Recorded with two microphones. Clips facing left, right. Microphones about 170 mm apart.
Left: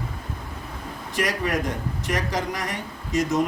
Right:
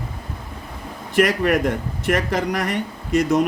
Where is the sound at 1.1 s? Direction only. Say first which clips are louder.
Right 8 dB; 65° right (ahead or behind).